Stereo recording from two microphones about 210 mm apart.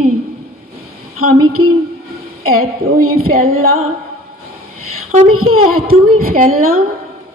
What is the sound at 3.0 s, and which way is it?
Speech, 90° right.